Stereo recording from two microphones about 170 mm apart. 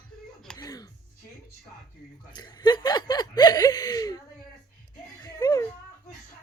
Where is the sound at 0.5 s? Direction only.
25° left (ahead or behind).